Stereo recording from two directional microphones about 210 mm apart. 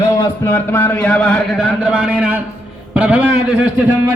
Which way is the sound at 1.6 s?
5° right (ahead or behind).